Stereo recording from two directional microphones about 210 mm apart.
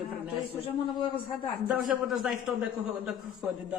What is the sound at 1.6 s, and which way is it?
A man's voice, 5° right (ahead or behind).